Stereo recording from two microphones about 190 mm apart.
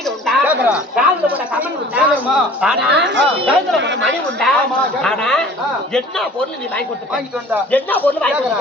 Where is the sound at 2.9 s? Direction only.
70° right (ahead or behind).